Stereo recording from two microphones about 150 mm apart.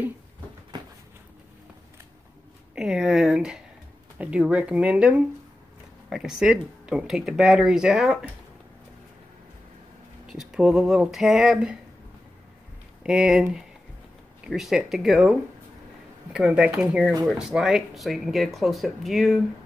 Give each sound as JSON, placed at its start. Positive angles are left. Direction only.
{"t": 2.7, "sound": "speech", "side_deg": -5}
{"t": 10.2, "sound": "speech", "side_deg": -5}
{"t": 13.0, "sound": "speech", "side_deg": -5}
{"t": 16.3, "sound": "speech", "side_deg": -5}